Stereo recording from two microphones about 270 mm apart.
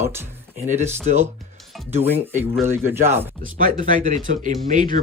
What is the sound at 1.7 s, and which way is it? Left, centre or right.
Speech, centre.